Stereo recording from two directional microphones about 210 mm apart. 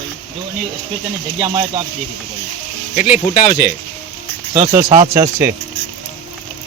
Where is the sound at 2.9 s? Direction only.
40° left (ahead or behind).